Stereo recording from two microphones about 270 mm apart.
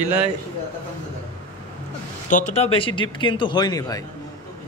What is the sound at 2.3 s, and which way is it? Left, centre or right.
Speech, left.